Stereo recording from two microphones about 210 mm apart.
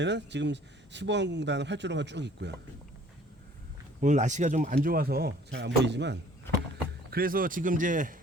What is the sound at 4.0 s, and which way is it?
Speech, 35° right (ahead or behind).